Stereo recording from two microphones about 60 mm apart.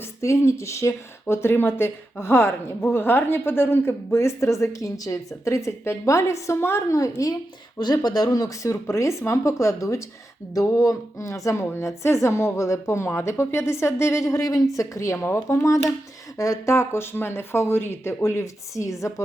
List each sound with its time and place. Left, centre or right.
0.2 s speech: left
6.9 s a woman's voice: left
8.0 s speech: left
10.5 s speech: left